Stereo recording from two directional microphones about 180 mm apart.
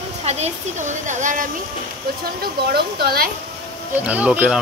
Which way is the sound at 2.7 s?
60° right (ahead or behind).